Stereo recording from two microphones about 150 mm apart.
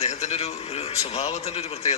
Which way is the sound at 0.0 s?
50° left (ahead or behind).